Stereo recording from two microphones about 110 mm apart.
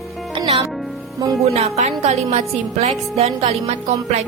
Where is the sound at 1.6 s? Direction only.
90° right; by 3.5 s 70° right (ahead or behind).